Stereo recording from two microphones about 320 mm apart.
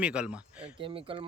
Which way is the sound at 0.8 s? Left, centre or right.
Centre.